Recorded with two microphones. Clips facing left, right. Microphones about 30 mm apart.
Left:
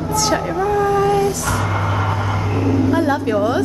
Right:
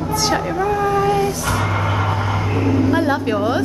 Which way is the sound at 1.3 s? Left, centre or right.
Centre.